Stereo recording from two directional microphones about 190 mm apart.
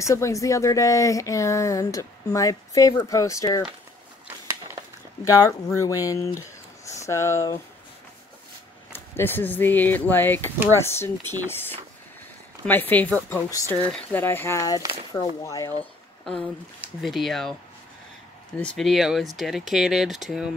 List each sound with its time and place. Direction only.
0.0 s speech: 15° left (ahead or behind)
5.2 s speech: 15° left (ahead or behind)
8.9 s speech: 10° left (ahead or behind)
15.8 s a sound: 5° left (ahead or behind)
17.0 s speech: centre (ahead or behind)
18.6 s speech: 5° left (ahead or behind)